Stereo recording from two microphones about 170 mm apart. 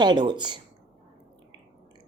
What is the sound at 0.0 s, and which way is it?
Speech, 25° right (ahead or behind).